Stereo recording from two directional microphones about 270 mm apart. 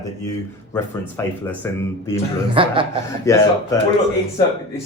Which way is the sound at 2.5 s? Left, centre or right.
Centre.